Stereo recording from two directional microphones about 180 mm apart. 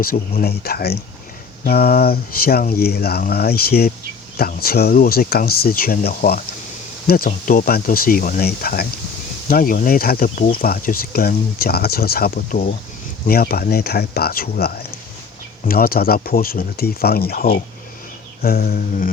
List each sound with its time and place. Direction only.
0.0 s speech: 55° left (ahead or behind)